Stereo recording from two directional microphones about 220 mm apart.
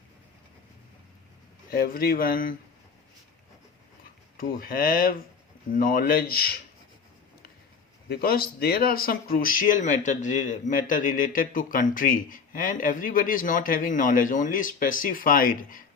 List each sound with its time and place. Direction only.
1.7 s speech: 40° left (ahead or behind)
4.4 s speech: 40° left (ahead or behind)
8.1 s speech: 40° left (ahead or behind)